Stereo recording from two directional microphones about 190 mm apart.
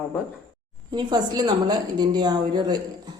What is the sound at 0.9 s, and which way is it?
A woman's voice, 20° right (ahead or behind).